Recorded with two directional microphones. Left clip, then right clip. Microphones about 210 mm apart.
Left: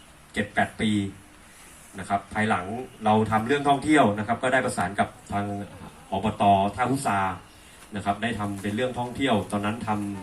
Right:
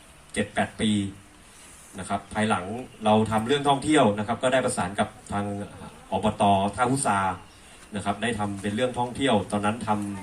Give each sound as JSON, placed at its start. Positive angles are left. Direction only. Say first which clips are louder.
{"t": 0.3, "sound": "a man's voice", "louder": "left 1 dB", "side_deg": -40}
{"t": 2.0, "sound": "a man's voice", "louder": "left 1 dB", "side_deg": -40}